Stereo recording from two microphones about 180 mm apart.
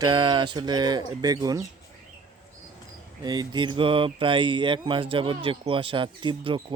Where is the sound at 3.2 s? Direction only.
25° right (ahead or behind).